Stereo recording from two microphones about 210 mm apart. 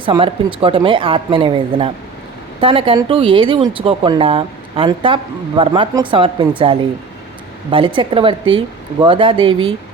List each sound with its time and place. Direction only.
0.0 s speech: 25° right (ahead or behind)